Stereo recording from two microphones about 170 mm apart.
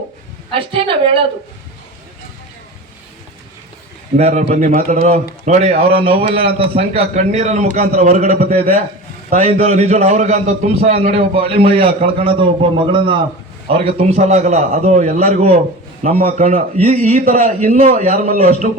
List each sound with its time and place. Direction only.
0.5 s a man's voice: 30° right (ahead or behind)
4.2 s a man's voice: 40° right (ahead or behind)
16.1 s a man's voice: 55° right (ahead or behind)